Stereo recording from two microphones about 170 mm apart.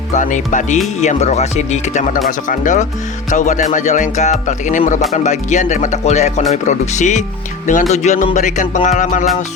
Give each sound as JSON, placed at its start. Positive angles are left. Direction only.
{"t": 0.1, "sound": "speech", "side_deg": 45}